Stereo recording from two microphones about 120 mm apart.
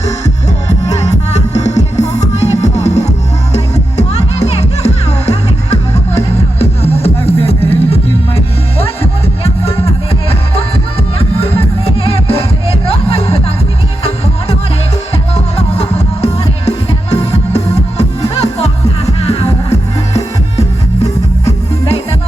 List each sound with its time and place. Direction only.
1.3 s music: 70° left (ahead or behind); by 7.9 s 55° left (ahead or behind)
9.4 s music: 55° left (ahead or behind)
17.2 s music: 60° left (ahead or behind)